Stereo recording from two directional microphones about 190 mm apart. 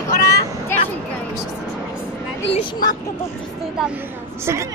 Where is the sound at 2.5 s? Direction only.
25° left (ahead or behind).